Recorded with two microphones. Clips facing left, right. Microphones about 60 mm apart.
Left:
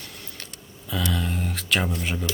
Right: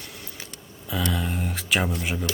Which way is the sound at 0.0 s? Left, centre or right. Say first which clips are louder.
Right 1 dB; centre.